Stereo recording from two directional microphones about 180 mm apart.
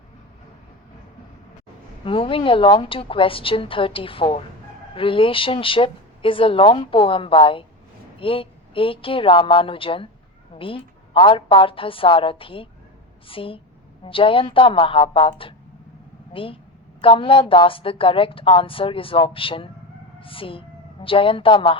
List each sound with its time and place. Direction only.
2.0 s a woman's voice: 30° left (ahead or behind)